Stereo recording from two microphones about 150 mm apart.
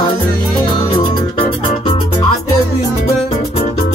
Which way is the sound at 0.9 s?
35° left (ahead or behind).